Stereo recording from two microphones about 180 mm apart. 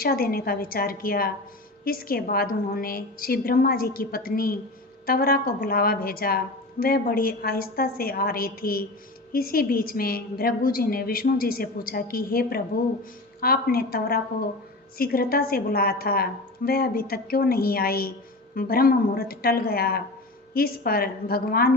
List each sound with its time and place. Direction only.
0.0 s a woman's voice: 55° left (ahead or behind)